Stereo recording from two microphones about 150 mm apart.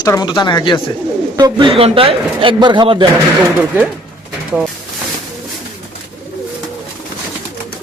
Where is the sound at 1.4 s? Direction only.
30° right (ahead or behind).